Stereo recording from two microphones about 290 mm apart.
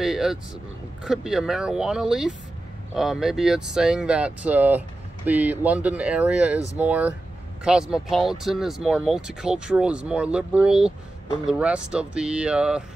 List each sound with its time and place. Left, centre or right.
0.0 s speech: centre